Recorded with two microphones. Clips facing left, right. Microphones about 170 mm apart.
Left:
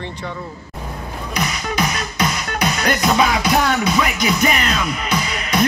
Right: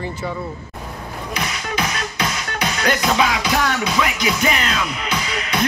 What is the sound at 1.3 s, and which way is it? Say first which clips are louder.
Music: left 2 dB; 40° left (ahead or behind).